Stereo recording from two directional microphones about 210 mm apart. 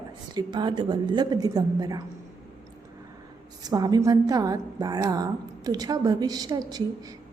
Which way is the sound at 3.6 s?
20° right (ahead or behind).